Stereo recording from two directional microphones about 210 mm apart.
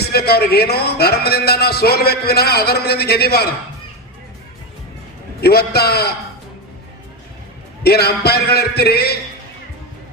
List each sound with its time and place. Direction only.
0.1 s a man's voice: 50° left (ahead or behind)
5.4 s a man's voice: 50° left (ahead or behind)
7.9 s a man's voice: 50° left (ahead or behind)